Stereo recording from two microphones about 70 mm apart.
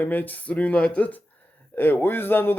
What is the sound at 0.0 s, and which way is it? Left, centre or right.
Speech, left.